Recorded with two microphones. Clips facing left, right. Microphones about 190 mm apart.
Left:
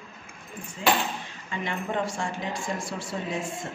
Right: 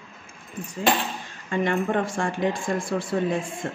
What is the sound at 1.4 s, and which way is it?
Speech, 50° right (ahead or behind).